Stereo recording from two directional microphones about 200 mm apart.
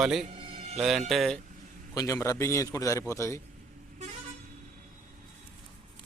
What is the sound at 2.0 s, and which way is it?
A man's voice, 15° left (ahead or behind).